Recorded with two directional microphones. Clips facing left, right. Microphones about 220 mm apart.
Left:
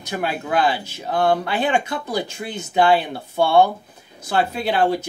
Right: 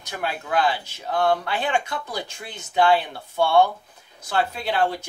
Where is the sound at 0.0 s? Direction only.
10° left (ahead or behind).